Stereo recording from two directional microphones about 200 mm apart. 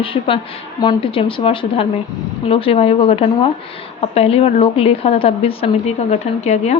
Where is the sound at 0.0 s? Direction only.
25° left (ahead or behind).